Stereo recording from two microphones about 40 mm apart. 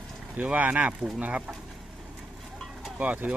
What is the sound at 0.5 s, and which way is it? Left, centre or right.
Speech, right.